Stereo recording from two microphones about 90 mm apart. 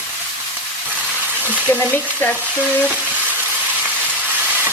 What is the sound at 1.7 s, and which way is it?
Frying, 20° left (ahead or behind).